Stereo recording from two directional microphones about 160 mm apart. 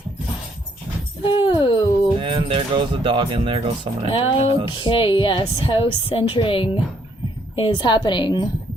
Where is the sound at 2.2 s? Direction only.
30° right (ahead or behind).